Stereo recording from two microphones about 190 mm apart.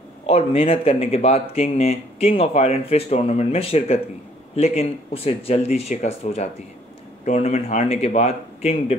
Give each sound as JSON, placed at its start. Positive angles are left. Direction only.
{"t": 0.3, "sound": "speech", "side_deg": 30}